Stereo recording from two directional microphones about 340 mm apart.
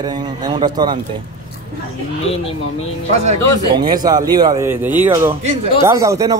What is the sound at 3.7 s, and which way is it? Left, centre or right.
Speech, centre.